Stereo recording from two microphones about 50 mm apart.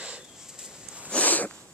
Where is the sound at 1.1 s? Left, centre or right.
Left.